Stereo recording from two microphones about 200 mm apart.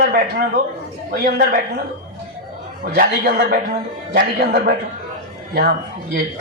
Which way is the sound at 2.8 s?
50° right (ahead or behind).